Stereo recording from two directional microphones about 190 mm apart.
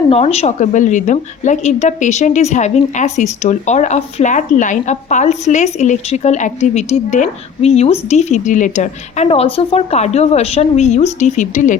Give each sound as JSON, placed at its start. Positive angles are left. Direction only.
{"t": 0.1, "sound": "a woman's voice", "side_deg": 35}